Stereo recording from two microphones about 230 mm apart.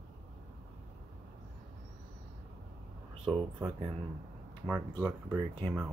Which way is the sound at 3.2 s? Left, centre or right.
Centre.